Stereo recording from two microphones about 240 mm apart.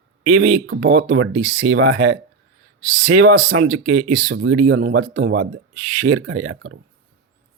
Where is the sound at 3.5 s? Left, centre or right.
Right.